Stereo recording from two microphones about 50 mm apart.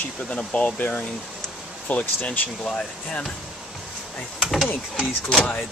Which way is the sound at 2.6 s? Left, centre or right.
Centre.